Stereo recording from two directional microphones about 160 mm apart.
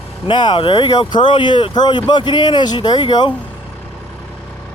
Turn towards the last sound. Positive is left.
turn(degrees=30)  # may be behind; listen again after turning